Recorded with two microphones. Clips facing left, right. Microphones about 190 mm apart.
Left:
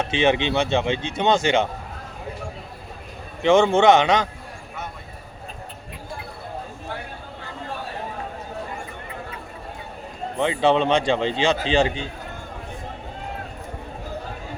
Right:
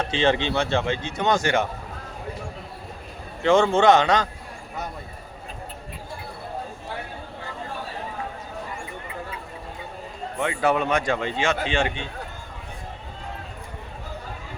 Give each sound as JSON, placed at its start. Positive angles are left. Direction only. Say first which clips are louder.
{"t": 0.0, "sound": "a man's voice", "louder": "left 2 dB", "side_deg": 20}
{"t": 3.4, "sound": "a man's voice", "louder": "left 2 dB", "side_deg": 20}
{"t": 10.3, "sound": "a man's voice", "louder": "left 4 dB", "side_deg": 25}